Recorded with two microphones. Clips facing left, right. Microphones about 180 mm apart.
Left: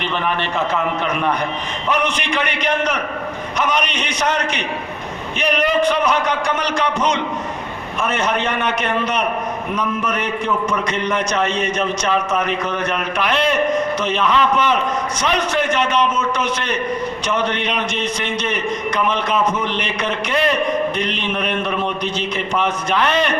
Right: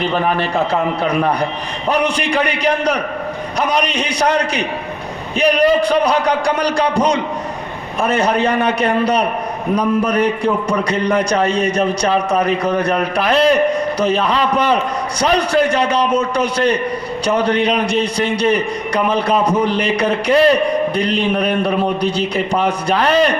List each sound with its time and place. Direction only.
0.0 s a man's voice: 40° right (ahead or behind)